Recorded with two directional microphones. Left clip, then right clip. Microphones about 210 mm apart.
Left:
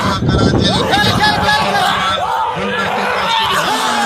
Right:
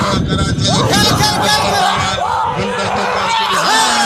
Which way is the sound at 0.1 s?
35° right (ahead or behind).